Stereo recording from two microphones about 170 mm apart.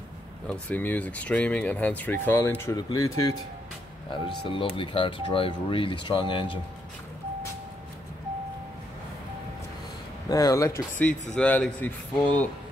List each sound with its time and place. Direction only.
0.5 s speech: 10° left (ahead or behind)
4.1 s speech: 30° left (ahead or behind)
10.3 s speech: 20° left (ahead or behind)